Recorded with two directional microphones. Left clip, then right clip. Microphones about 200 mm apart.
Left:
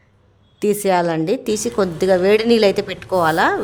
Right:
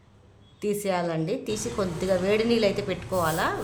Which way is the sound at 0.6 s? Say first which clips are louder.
Left 10 dB; 40° left (ahead or behind).